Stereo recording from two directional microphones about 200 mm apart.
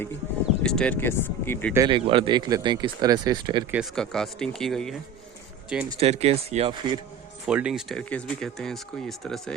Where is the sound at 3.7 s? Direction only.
Centre (ahead or behind).